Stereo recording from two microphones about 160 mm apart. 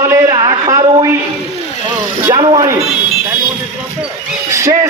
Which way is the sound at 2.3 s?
25° right (ahead or behind).